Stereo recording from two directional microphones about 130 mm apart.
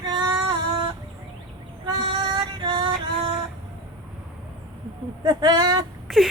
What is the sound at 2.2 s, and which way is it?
Female singing, 35° right (ahead or behind).